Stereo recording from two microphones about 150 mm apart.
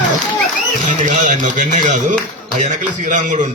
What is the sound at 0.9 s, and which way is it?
A man's voice, 55° right (ahead or behind).